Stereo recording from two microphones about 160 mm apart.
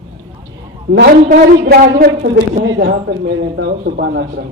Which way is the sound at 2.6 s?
90° right.